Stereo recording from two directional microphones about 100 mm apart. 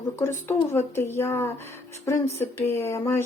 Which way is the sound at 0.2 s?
25° left (ahead or behind).